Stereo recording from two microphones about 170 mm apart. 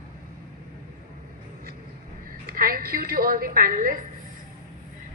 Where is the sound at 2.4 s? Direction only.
60° right (ahead or behind).